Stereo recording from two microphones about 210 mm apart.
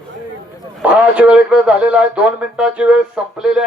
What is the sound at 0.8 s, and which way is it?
A man's voice, 5° right (ahead or behind).